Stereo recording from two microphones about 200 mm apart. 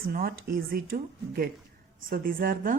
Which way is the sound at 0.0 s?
45° right (ahead or behind).